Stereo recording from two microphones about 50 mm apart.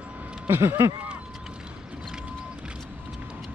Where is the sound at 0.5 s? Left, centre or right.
Right.